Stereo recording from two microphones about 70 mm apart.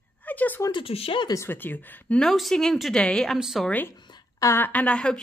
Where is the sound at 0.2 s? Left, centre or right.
Left.